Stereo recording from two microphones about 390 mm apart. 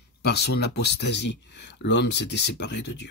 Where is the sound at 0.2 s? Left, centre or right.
Left.